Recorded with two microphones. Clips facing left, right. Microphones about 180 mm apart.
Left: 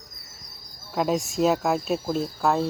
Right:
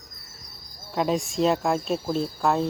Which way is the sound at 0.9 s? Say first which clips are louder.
Even; centre (ahead or behind).